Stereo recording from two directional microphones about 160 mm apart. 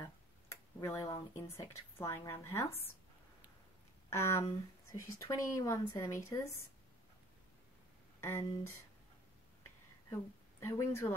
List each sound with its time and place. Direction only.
0.0 s speech: 20° left (ahead or behind)
4.1 s a woman's voice: 15° left (ahead or behind)
8.2 s speech: 15° left (ahead or behind)
10.6 s a woman's voice: 15° left (ahead or behind)